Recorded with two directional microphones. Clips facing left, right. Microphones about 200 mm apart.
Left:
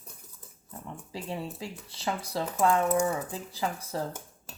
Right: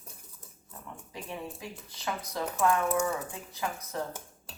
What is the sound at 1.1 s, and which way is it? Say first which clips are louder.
Speech: left 4 dB; 30° left (ahead or behind).